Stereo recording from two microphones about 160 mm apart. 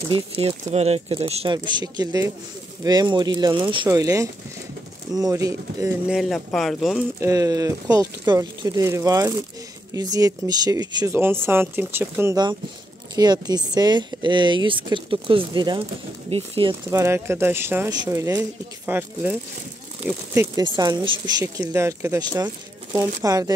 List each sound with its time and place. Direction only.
0.1 s speech: 35° right (ahead or behind); by 5.9 s 20° right (ahead or behind)
6.0 s speech: centre (ahead or behind)
7.2 s speech: 20° right (ahead or behind)
13.1 s speech: 25° right (ahead or behind)
16.9 s speech: 15° right (ahead or behind)
20.3 s speech: 25° right (ahead or behind)